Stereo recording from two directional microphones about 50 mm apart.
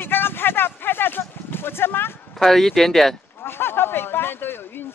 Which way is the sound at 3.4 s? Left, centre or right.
Left.